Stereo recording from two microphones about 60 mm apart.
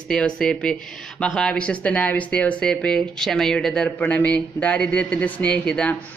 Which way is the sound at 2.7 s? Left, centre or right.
Centre.